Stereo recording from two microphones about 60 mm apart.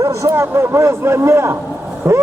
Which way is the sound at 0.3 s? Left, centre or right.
Right.